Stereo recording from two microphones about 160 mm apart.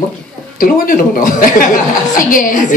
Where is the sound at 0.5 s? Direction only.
60° left (ahead or behind).